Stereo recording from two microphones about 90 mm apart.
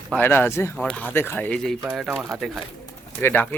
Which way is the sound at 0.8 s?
15° left (ahead or behind).